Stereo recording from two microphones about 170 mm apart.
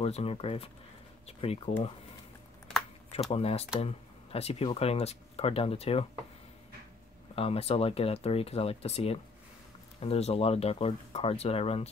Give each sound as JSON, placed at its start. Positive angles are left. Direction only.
{"t": 0.0, "sound": "speech", "side_deg": 35}
{"t": 3.3, "sound": "speech", "side_deg": 35}
{"t": 7.3, "sound": "speech", "side_deg": 35}